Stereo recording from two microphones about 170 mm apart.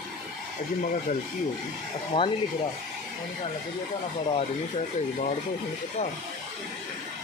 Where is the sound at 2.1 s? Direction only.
30° left (ahead or behind).